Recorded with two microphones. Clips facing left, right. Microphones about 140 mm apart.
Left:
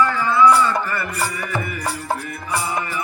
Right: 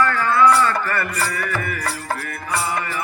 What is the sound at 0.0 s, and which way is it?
Music, 10° left (ahead or behind).